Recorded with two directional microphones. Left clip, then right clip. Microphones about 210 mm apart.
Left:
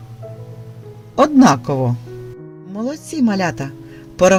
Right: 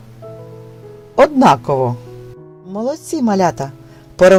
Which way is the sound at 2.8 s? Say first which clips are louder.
Right 2 dB; 15° right (ahead or behind).